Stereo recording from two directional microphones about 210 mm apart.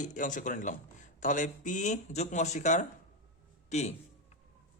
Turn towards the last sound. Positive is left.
turn(degrees=35)  # may be behind; listen again after turning